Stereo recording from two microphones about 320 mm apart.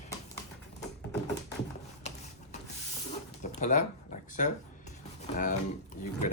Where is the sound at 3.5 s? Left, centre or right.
Left.